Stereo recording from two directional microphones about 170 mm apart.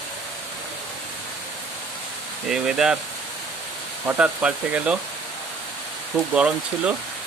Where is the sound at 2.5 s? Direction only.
5° right (ahead or behind).